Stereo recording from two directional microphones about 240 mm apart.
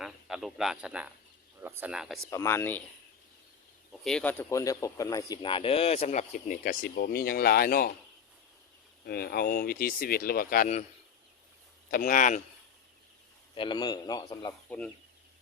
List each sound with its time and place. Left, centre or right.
0.0 s speech: centre
2.3 s speech: centre
4.0 s speech: centre; by 7.9 s left
9.0 s speech: left
11.9 s speech: left
13.6 s speech: centre